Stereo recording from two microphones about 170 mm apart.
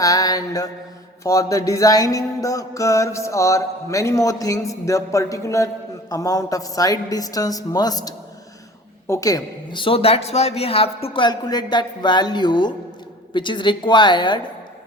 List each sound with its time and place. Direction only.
0.0 s music: 20° left (ahead or behind)